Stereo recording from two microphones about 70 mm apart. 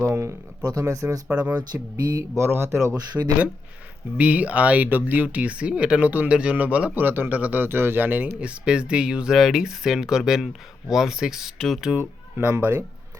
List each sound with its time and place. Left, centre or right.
0.0 s speech: right
1.3 s speech: centre
1.5 s speech: right
2.4 s speech: right
2.9 s speech: right
4.2 s speech: right
11.9 s speech: right